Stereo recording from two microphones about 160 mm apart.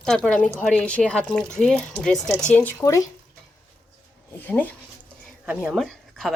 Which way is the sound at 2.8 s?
20° left (ahead or behind).